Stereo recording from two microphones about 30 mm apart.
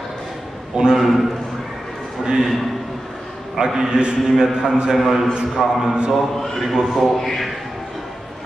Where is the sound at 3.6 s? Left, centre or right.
Centre.